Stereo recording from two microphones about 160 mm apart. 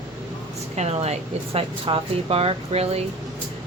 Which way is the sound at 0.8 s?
40° right (ahead or behind).